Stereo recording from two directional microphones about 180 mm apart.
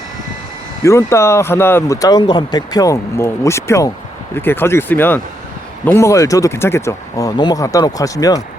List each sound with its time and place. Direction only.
0.9 s speech: 15° left (ahead or behind)